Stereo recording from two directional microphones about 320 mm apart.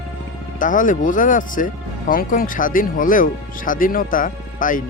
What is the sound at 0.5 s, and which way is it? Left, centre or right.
Speech, left.